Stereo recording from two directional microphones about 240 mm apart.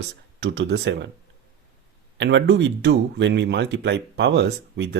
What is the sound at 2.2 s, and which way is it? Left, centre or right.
Speech, right.